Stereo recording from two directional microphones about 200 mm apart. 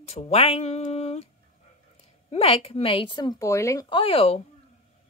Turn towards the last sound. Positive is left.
turn(degrees=30)  # may be behind; listen again after turning